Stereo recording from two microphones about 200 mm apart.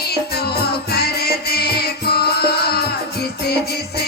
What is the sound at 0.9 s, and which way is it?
Music, 50° left (ahead or behind).